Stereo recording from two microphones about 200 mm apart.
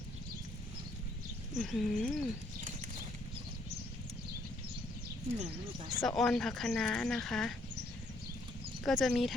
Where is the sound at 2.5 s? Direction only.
40° right (ahead or behind).